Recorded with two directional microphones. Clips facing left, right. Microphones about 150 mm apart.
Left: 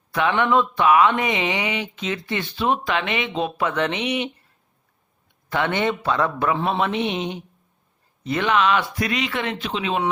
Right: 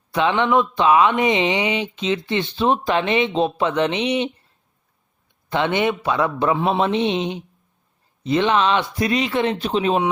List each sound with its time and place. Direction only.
0.1 s speech: 20° right (ahead or behind)
5.5 s a man's voice: 20° right (ahead or behind)
6.8 s speech: 25° right (ahead or behind)